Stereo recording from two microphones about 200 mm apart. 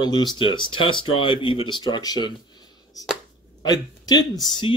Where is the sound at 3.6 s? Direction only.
20° left (ahead or behind).